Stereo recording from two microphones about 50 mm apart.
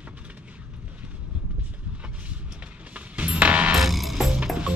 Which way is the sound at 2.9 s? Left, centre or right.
Right.